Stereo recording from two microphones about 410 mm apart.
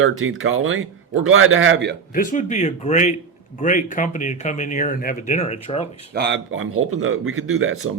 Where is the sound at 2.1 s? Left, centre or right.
Centre.